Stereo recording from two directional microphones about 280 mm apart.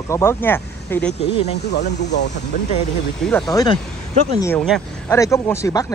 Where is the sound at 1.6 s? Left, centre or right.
Left.